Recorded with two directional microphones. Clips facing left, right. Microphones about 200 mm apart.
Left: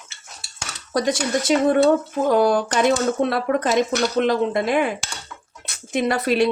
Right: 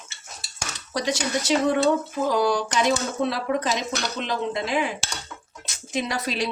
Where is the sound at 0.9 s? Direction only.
50° left (ahead or behind).